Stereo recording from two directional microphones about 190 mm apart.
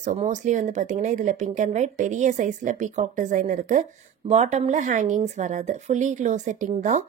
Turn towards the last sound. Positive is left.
turn(degrees=-40)  # may be behind; listen again after turning